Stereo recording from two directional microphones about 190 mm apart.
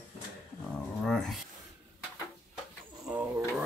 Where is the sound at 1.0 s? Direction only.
Centre (ahead or behind).